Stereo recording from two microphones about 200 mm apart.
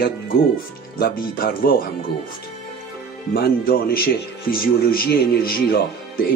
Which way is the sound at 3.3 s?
50° left (ahead or behind).